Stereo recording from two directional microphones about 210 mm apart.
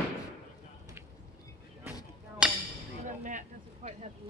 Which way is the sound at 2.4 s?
5° right (ahead or behind).